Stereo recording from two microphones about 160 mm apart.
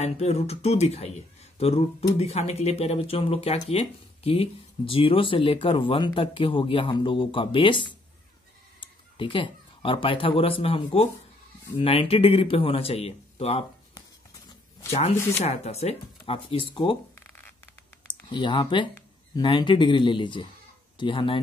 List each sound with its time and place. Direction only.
0.0 s speech: 40° left (ahead or behind)
14.9 s speech: 40° left (ahead or behind)
18.0 s speech: 30° left (ahead or behind)